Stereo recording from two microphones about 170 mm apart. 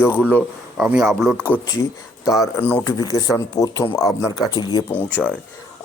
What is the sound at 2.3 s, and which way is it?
Speech, 20° left (ahead or behind).